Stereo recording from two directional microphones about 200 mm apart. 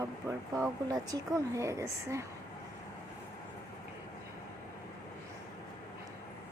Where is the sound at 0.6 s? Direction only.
15° right (ahead or behind).